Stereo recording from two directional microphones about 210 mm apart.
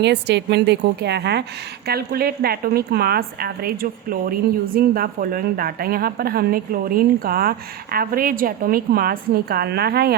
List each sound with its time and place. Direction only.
0.0 s a woman's voice: 55° right (ahead or behind)